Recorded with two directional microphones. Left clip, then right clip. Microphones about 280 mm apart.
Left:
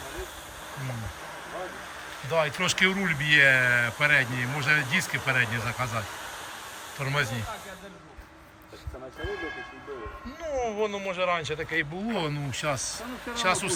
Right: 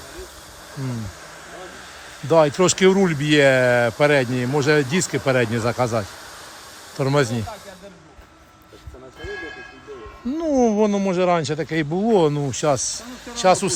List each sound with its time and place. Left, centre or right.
2.3 s speech: centre
7.0 s speech: centre
10.3 s speech: centre